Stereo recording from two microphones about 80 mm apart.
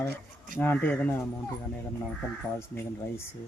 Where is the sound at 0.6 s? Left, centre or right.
Left.